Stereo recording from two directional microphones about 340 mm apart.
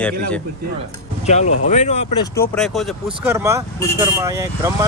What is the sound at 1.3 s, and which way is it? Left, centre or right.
Speech, centre.